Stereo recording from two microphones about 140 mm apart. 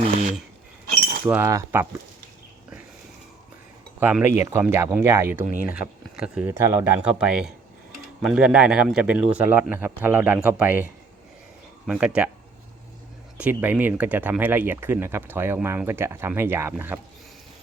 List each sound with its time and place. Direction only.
0.0 s speech: 55° right (ahead or behind)
1.2 s speech: 10° right (ahead or behind)
1.5 s speech: 20° right (ahead or behind)
4.0 s speech: 10° right (ahead or behind)
5.7 s speech: 5° right (ahead or behind)
6.5 s speech: 15° right (ahead or behind)
11.9 s speech: 5° right (ahead or behind)
13.3 s speech: 10° right (ahead or behind)